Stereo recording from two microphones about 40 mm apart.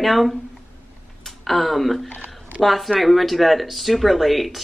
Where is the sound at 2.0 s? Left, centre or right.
Left.